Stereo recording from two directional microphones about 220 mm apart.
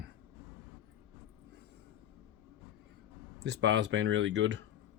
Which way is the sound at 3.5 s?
50° right (ahead or behind).